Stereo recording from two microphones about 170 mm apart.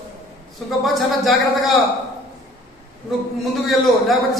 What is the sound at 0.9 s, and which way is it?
Speech, centre (ahead or behind).